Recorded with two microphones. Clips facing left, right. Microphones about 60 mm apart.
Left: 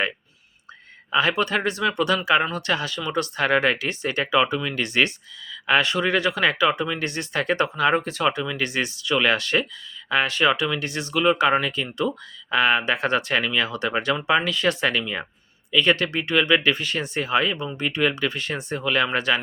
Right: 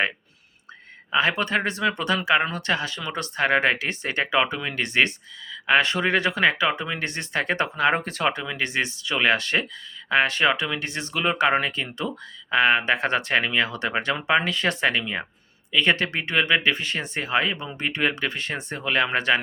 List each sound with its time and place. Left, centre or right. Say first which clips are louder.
1.1 s speech: left 1 dB; right